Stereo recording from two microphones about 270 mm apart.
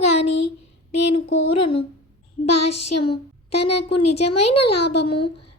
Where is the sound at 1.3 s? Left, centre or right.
Left.